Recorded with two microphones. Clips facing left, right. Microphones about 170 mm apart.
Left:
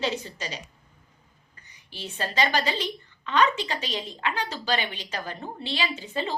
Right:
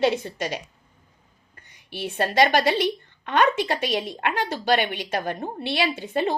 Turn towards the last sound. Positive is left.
turn(degrees=-55)  # may be behind; listen again after turning